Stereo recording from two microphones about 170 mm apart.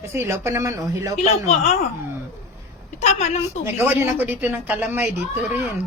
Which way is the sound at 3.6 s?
10° right (ahead or behind).